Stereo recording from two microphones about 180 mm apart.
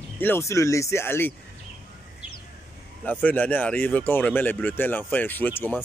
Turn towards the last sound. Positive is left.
turn(degrees=10)  # may be behind; listen again after turning